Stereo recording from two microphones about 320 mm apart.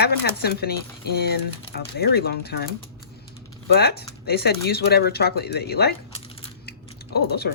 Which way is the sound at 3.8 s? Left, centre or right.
Left.